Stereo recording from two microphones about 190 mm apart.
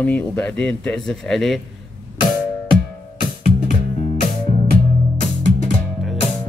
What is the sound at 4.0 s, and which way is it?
Music, 35° left (ahead or behind).